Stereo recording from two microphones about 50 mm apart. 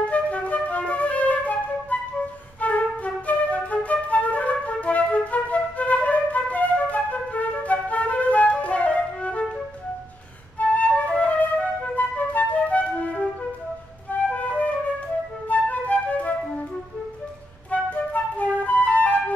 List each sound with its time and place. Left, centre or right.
0.1 s flute: left
10.6 s flute: left
17.6 s flute: left